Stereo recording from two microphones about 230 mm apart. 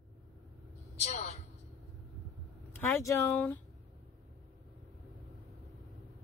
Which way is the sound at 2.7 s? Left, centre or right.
Centre.